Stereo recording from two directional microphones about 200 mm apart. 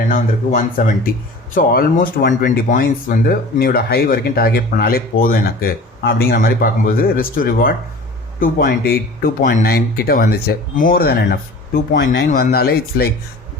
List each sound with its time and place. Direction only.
0.1 s speech: 40° left (ahead or behind)